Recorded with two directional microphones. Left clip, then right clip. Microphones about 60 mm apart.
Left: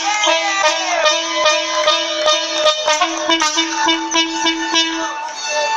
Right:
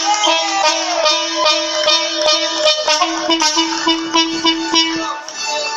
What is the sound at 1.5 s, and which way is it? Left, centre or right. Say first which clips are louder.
Sitar: even; right.